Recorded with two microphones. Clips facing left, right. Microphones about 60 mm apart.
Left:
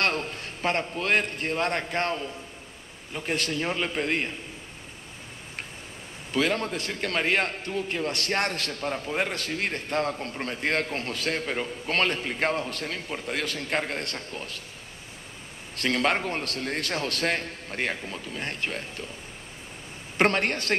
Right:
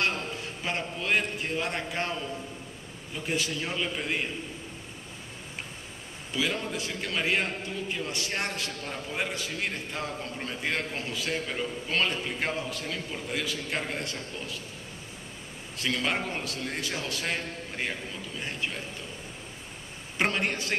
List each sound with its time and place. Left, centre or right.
0.0 s a man's voice: left
3.3 s a man's voice: left
3.5 s a man's voice: left
4.0 s a man's voice: left
6.3 s a man's voice: left
8.8 s a man's voice: left
9.8 s a man's voice: left
12.8 s a man's voice: left
13.3 s a man's voice: left
15.7 s a man's voice: left
20.2 s a man's voice: left